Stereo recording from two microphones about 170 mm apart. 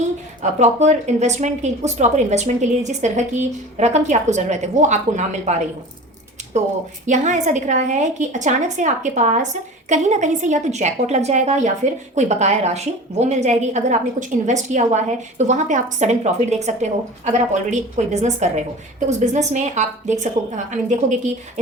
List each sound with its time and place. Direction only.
0.6 s a woman's voice: 45° right (ahead or behind)
7.0 s a woman's voice: 45° right (ahead or behind)